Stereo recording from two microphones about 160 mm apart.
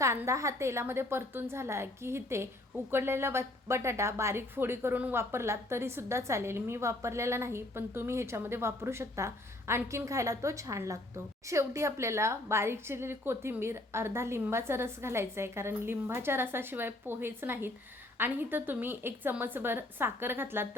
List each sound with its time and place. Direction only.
0.0 s a woman's voice: 15° right (ahead or behind)